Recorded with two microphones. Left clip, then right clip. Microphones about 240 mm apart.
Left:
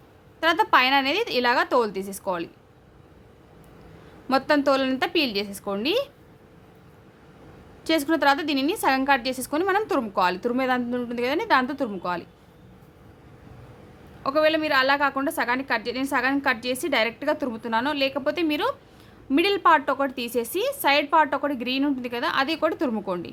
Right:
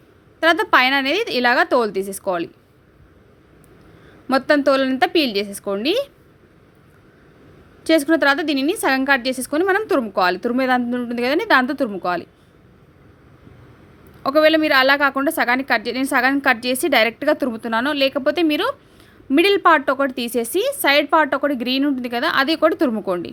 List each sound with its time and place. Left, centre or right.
0.3 s a woman's voice: centre
4.3 s a woman's voice: centre
7.9 s a woman's voice: centre
14.2 s a woman's voice: right